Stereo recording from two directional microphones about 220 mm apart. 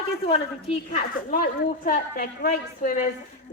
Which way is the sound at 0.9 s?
40° left (ahead or behind).